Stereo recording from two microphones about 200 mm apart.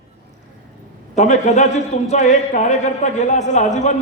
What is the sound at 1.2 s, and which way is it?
A man's voice, 35° left (ahead or behind).